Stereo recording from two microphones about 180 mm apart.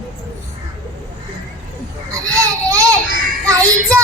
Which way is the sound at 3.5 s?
20° right (ahead or behind).